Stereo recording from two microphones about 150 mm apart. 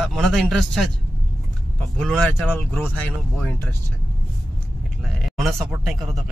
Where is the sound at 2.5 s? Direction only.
15° left (ahead or behind).